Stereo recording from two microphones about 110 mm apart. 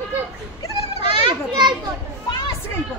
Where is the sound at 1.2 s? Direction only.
40° right (ahead or behind).